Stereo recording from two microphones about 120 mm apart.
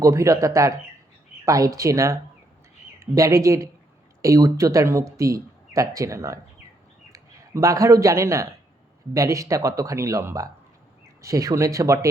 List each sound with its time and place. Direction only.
0.0 s speech: 25° right (ahead or behind)